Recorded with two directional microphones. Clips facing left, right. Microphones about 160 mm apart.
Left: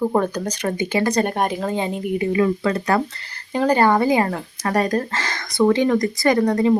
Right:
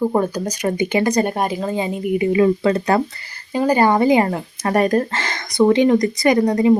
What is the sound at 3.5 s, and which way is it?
Speech, 10° right (ahead or behind).